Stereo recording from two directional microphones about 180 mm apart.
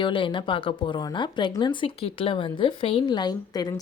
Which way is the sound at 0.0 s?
25° left (ahead or behind).